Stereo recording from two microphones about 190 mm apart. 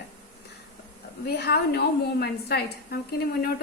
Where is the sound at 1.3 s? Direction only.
55° left (ahead or behind).